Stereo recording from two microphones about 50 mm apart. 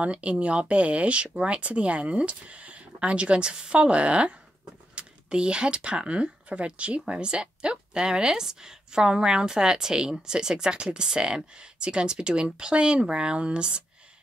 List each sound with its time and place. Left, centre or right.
0.0 s speech: right